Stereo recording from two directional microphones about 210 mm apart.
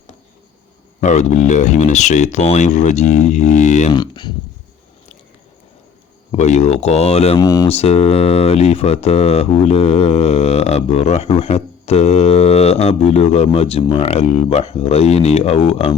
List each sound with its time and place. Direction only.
1.0 s speech: 35° left (ahead or behind)
3.9 s speech: 20° left (ahead or behind)
6.3 s speech: 30° left (ahead or behind)
7.3 s speech: 15° left (ahead or behind)
7.7 s speech: 30° left (ahead or behind)